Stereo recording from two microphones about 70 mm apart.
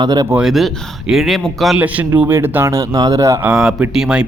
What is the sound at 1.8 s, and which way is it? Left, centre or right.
Speech, right.